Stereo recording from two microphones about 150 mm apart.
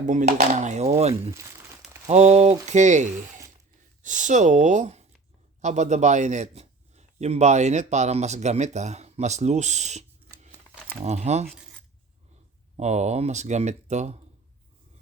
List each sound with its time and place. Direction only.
0.0 s speech: 55° right (ahead or behind)
1.3 s crumpling: 20° right (ahead or behind)
2.0 s a man's voice: 45° right (ahead or behind)
12.7 s speech: 45° right (ahead or behind)